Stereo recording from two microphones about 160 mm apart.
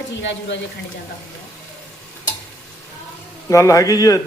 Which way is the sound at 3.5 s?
20° left (ahead or behind).